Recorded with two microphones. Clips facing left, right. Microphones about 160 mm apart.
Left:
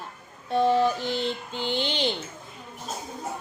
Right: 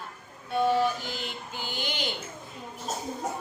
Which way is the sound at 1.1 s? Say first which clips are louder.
Left 8 dB; 30° left (ahead or behind).